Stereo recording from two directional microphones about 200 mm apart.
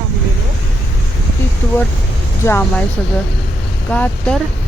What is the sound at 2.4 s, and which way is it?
Speech, 10° left (ahead or behind).